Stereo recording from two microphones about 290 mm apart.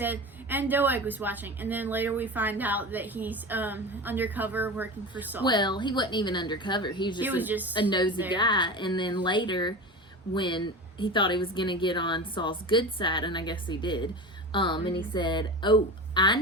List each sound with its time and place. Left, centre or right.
0.0 s a woman's voice: centre
5.5 s a woman's voice: centre
7.2 s speech: centre
7.7 s a woman's voice: centre